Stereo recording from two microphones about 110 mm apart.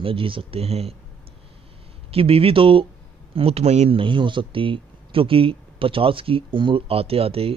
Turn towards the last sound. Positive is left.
turn(degrees=-60)  # may be behind; listen again after turning